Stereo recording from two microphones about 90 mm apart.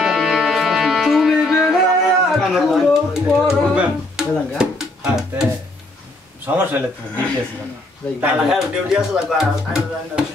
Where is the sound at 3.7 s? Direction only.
10° right (ahead or behind).